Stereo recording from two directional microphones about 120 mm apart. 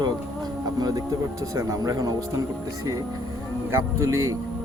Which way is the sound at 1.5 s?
30° right (ahead or behind).